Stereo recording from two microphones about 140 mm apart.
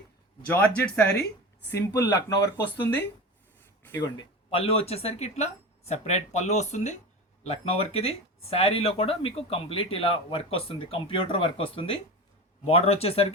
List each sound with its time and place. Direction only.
0.4 s speech: 10° left (ahead or behind)
1.9 s speech: 20° left (ahead or behind)
4.0 s speech: 30° left (ahead or behind)
4.6 s speech: 45° left (ahead or behind)